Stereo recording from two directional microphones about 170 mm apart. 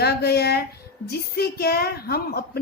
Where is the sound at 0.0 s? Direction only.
65° left (ahead or behind).